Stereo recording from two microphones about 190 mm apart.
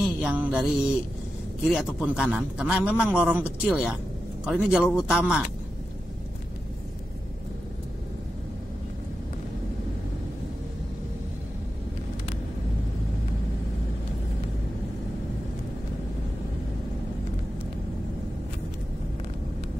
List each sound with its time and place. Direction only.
0.2 s music: 5° right (ahead or behind)
1.6 s a man's voice: centre (ahead or behind)